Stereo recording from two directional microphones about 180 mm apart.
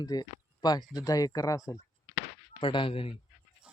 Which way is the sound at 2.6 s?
30° left (ahead or behind).